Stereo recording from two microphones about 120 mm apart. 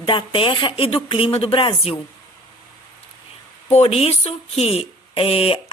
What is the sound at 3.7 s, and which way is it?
Speech, 55° left (ahead or behind).